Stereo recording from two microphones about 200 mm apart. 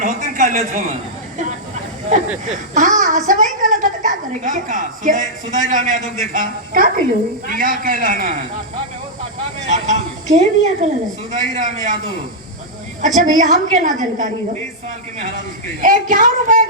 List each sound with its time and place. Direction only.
0.0 s a sound: 40° right (ahead or behind)
2.5 s a woman's voice: 40° right (ahead or behind)
9.6 s a woman's voice: 35° right (ahead or behind)
13.0 s a woman's voice: 40° right (ahead or behind)
15.8 s a woman's voice: 40° right (ahead or behind)